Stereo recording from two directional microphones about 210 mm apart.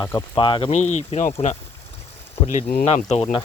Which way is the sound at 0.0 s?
15° left (ahead or behind).